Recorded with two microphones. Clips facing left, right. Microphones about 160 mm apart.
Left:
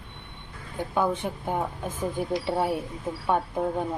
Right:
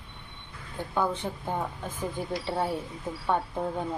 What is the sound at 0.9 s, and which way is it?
Speech, 15° left (ahead or behind).